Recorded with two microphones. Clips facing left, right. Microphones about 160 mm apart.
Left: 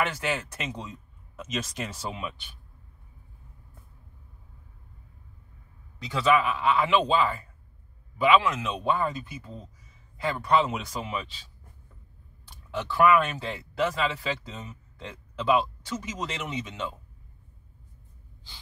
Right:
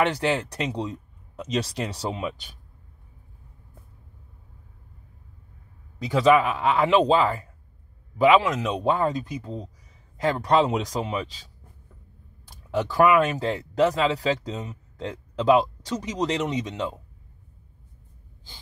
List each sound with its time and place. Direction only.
0.0 s speech: 35° right (ahead or behind)
6.1 s speech: 45° right (ahead or behind)
12.4 s computer keyboard: 40° right (ahead or behind)
13.4 s speech: 40° right (ahead or behind)